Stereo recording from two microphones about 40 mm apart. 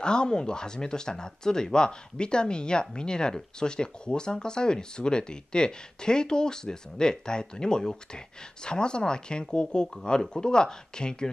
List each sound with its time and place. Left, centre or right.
0.0 s speech: left